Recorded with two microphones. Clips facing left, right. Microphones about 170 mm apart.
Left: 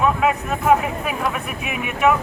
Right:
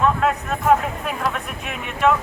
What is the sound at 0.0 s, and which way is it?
Speech, 5° left (ahead or behind).